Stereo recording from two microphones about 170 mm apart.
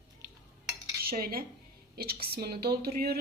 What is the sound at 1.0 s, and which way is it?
Cutlery, 60° right (ahead or behind).